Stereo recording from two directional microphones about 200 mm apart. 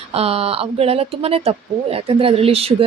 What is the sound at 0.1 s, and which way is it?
Speech, 30° right (ahead or behind).